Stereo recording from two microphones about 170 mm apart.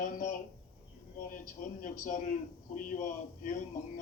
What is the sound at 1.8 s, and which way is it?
A man's voice, 50° left (ahead or behind).